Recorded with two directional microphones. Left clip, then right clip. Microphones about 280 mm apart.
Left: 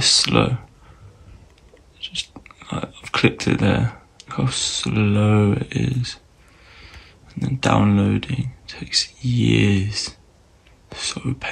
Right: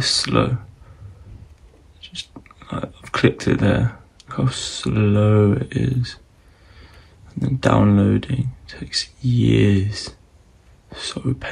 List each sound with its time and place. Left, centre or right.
0.0 s speech: centre
2.0 s speech: centre
7.3 s speech: centre